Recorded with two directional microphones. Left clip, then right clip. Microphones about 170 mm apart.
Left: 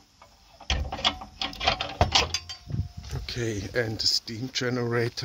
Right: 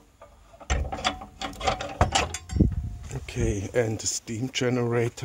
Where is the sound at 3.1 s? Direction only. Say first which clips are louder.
Right 1 dB; 10° right (ahead or behind).